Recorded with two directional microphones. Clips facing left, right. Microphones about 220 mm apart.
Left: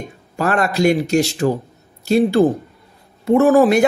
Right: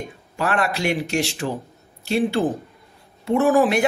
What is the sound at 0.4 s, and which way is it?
A man's voice, 40° left (ahead or behind).